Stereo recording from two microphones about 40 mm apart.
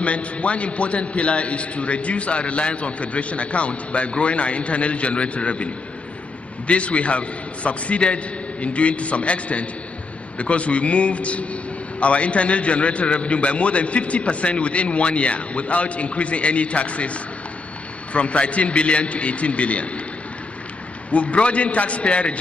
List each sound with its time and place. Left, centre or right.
0.0 s a man's voice: left
6.7 s a man's voice: left
21.1 s a man's voice: left